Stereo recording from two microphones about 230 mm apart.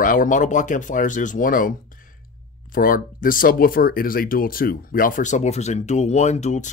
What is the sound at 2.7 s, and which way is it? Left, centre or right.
Speech, left.